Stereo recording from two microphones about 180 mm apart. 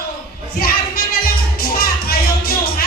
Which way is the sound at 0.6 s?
55° left (ahead or behind).